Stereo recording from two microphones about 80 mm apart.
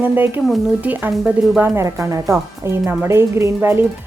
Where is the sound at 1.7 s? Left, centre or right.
Right.